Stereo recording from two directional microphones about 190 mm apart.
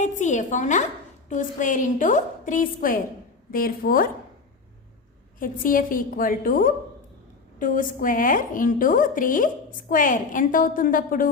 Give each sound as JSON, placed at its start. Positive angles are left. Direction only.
{"t": 0.0, "sound": "a woman's voice", "side_deg": 40}
{"t": 5.4, "sound": "a woman's voice", "side_deg": 45}